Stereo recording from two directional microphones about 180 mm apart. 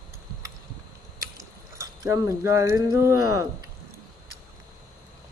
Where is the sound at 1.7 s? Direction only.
20° right (ahead or behind).